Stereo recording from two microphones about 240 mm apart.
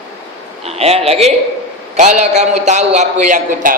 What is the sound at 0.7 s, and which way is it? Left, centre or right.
A man's voice, right.